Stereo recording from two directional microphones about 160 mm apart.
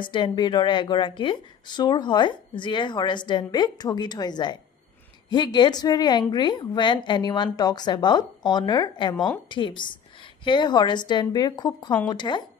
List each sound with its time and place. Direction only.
0.0 s a woman's voice: 30° left (ahead or behind)